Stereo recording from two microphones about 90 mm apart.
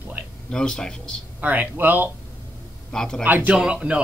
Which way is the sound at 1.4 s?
20° right (ahead or behind).